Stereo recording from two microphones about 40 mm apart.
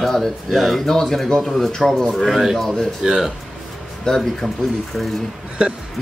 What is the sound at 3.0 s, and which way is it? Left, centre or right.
Speech, centre.